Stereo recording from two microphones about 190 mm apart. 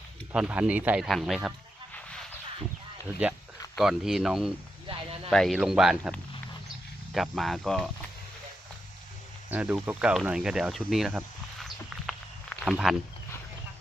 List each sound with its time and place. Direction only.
0.3 s speech: 5° right (ahead or behind)
3.8 s speech: centre (ahead or behind)
4.9 s a sound: 30° right (ahead or behind)
5.3 s speech: centre (ahead or behind)
9.5 s cricket: 5° right (ahead or behind)
12.7 s speech: centre (ahead or behind)